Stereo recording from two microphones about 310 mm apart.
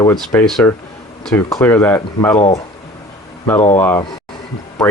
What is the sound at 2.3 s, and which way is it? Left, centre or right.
Speech, centre.